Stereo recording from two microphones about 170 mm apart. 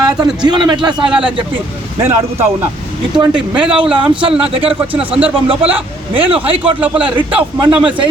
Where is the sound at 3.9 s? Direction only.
30° right (ahead or behind).